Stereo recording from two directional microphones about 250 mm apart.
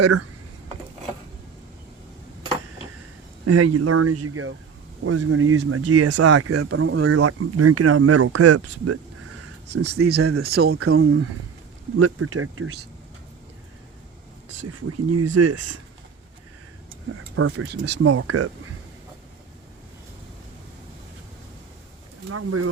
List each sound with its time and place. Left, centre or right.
0.0 s speech: right
3.4 s speech: right
9.6 s speech: right
10.8 s speech: right
14.7 s speech: right
17.3 s speech: right
17.7 s speech: right
18.0 s speech: right
22.3 s speech: right